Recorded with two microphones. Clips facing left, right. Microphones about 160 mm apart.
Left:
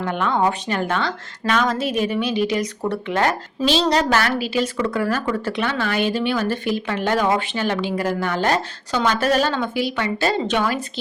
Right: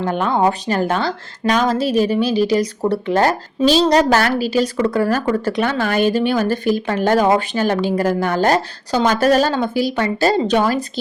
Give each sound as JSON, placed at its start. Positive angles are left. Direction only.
{"t": 0.0, "sound": "speech", "side_deg": -35}